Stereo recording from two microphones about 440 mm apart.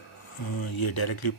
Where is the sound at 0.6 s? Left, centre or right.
Left.